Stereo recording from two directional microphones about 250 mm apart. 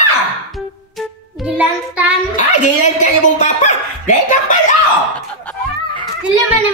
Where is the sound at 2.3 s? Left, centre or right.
Left.